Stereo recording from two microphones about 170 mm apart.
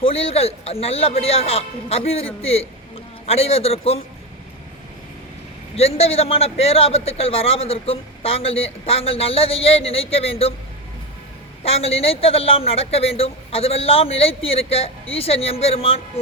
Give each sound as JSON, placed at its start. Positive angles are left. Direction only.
{"t": 0.0, "sound": "a man's voice", "side_deg": 35}
{"t": 5.7, "sound": "a man's voice", "side_deg": 35}
{"t": 11.6, "sound": "a man's voice", "side_deg": 35}